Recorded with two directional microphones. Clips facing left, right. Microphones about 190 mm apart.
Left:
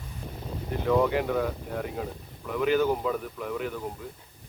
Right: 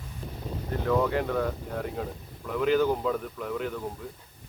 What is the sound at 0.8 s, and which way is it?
Speech, 10° left (ahead or behind).